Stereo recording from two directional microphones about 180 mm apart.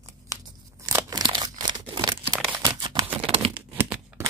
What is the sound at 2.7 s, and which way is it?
Typing, 25° right (ahead or behind).